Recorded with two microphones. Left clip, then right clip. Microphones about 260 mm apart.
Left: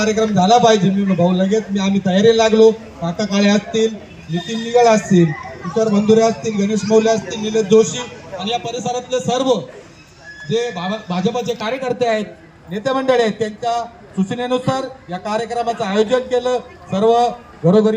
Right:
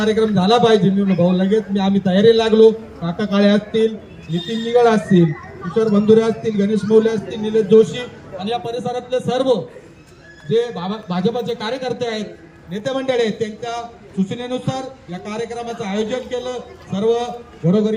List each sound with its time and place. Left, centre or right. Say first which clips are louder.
0.0 s a man's voice: left 1 dB; centre